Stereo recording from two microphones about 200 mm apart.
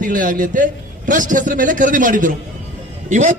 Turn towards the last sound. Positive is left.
turn(degrees=-40)  # may be behind; listen again after turning